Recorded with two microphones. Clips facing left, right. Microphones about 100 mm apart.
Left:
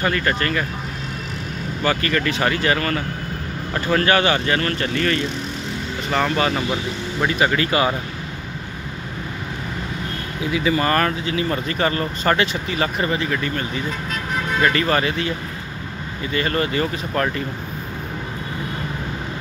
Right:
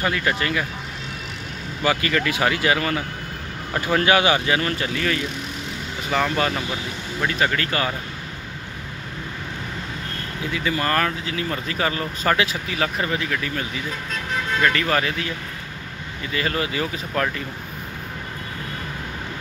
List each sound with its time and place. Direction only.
0.0 s speech: 5° right (ahead or behind)
1.8 s speech: 10° right (ahead or behind); by 7.9 s 10° left (ahead or behind)
10.5 s speech: 5° left (ahead or behind)
16.3 s speech: centre (ahead or behind)